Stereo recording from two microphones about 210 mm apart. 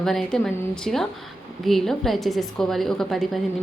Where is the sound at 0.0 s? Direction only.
Centre (ahead or behind).